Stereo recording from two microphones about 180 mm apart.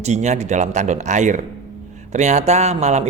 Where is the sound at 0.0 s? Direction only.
40° right (ahead or behind).